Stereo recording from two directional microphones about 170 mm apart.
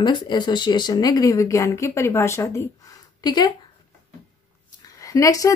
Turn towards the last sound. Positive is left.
turn(degrees=20)  # may be behind; listen again after turning